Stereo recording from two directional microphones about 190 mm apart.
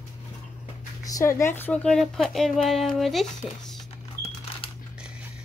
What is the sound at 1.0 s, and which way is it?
Speech, 15° left (ahead or behind).